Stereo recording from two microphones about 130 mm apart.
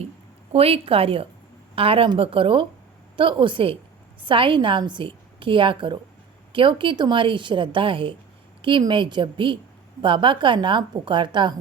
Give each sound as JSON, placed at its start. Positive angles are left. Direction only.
{"t": 0.5, "sound": "a woman's voice", "side_deg": -50}